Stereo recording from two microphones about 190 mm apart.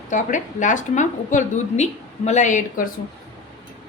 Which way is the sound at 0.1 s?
40° left (ahead or behind).